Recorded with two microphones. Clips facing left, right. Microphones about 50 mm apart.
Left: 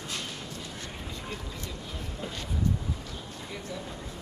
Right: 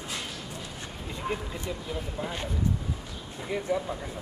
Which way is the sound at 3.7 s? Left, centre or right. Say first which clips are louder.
Right 12 dB; right.